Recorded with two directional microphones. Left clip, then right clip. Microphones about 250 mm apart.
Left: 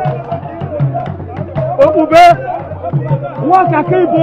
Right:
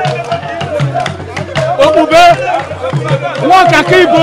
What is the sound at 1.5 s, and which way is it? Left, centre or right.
Music, centre.